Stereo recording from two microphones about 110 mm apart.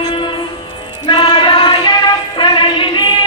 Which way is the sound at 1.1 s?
50° left (ahead or behind).